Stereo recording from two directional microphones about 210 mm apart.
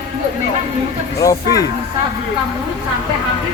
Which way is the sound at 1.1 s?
15° left (ahead or behind).